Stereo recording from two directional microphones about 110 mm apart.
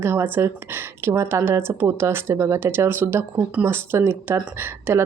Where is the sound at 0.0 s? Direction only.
20° right (ahead or behind).